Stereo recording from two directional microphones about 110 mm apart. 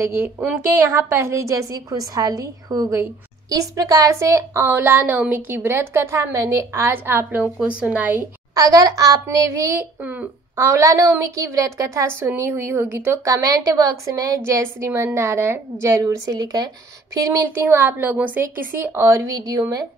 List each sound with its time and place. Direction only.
0.0 s a woman's voice: 25° right (ahead or behind)
8.5 s a woman's voice: 35° right (ahead or behind)
9.8 s a woman's voice: 15° right (ahead or behind); by 17.5 s 30° right (ahead or behind)
17.6 s a woman's voice: 20° right (ahead or behind)